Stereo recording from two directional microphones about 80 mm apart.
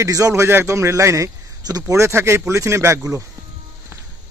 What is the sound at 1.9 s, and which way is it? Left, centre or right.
Speech, right.